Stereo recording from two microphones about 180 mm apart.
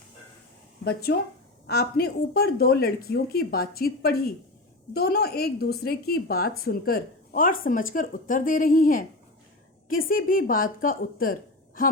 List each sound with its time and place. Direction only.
1.6 s a woman's voice: 60° left (ahead or behind)